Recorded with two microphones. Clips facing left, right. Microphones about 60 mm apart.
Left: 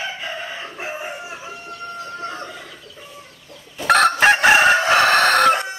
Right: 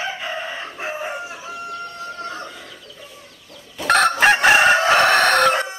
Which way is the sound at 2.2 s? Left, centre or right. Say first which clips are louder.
Right 1 dB; centre.